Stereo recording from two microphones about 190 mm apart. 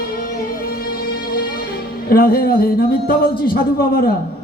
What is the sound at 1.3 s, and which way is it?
Music, 50° left (ahead or behind).